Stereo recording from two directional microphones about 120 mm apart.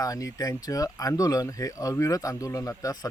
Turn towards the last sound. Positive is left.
turn(degrees=30)  # may be behind; listen again after turning